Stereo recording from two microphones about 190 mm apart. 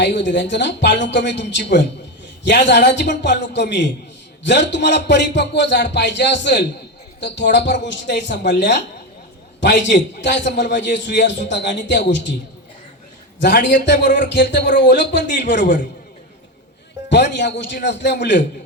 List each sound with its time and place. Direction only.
0.0 s a man's voice: 65° left (ahead or behind)
13.4 s speech: 65° left (ahead or behind)
17.1 s a man's voice: 65° left (ahead or behind)